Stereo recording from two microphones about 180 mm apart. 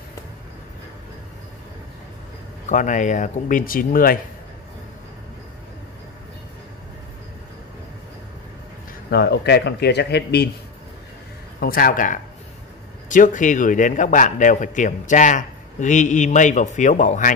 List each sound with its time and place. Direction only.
2.7 s a man's voice: 45° left (ahead or behind)
9.1 s speech: 65° left (ahead or behind)
11.6 s a man's voice: 55° left (ahead or behind)